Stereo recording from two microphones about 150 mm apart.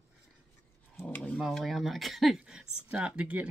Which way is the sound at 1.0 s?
10° left (ahead or behind).